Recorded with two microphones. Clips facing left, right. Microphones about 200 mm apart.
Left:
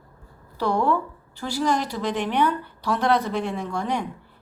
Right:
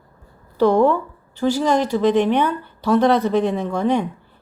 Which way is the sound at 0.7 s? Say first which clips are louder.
Right 3 dB; 20° right (ahead or behind).